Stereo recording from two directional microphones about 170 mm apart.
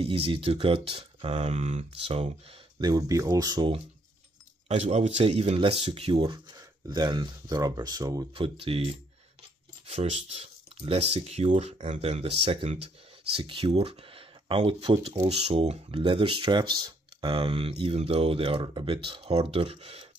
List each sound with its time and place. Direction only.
0.0 s speech: 35° right (ahead or behind)
2.8 s speech: 20° right (ahead or behind)
4.6 s speech: 40° right (ahead or behind); by 8.3 s 20° right (ahead or behind)
8.4 s speech: 35° right (ahead or behind)